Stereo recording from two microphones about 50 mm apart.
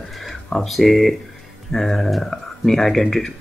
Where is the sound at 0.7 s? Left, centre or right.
Centre.